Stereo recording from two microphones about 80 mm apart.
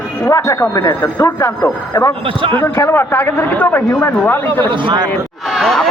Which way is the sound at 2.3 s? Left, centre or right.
Right.